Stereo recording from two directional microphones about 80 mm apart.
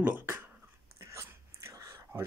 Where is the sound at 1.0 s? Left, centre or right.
Right.